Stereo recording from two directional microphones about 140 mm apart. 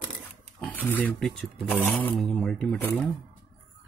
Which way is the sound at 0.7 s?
10° left (ahead or behind).